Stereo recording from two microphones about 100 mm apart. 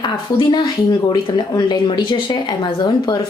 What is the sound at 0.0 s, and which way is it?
A woman's voice, 50° left (ahead or behind).